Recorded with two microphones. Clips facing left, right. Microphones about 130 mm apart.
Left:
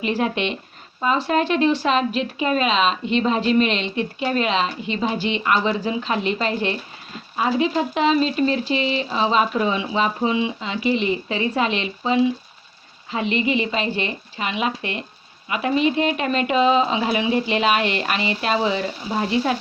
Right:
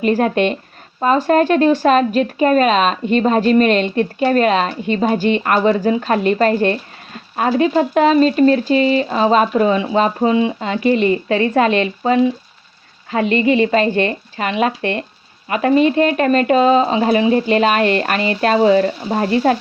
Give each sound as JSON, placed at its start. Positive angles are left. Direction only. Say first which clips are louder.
{"t": 0.0, "sound": "a woman's voice", "louder": "right 7 dB", "side_deg": -45}